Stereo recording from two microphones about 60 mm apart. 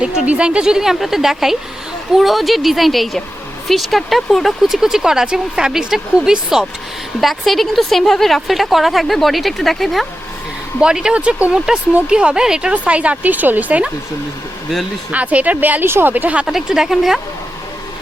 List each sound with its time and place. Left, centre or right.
0.3 s a woman's voice: centre
7.2 s a woman's voice: centre
10.8 s speech: centre
11.5 s speech: centre; by 13.8 s right
15.1 s speech: right
15.8 s speech: right
16.1 s speech: right
16.5 s speech: centre